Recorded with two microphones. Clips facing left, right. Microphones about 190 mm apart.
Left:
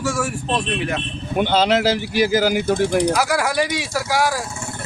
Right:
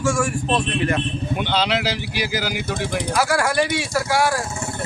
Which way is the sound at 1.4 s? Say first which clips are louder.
Left 6 dB; 45° left (ahead or behind).